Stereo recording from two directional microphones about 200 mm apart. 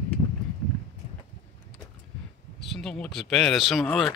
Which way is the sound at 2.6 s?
Centre (ahead or behind).